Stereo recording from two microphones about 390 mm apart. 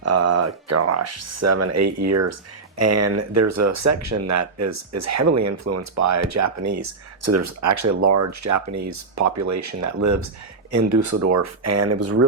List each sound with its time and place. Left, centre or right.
0.0 s speech: right